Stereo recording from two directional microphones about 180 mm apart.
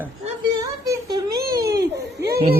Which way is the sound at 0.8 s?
20° right (ahead or behind).